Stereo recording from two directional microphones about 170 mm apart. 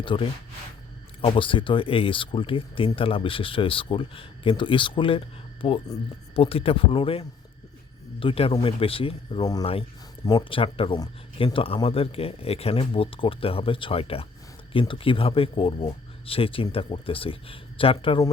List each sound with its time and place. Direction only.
0.0 s speech: 30° left (ahead or behind)